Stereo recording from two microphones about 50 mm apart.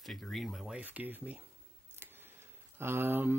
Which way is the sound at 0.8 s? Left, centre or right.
Right.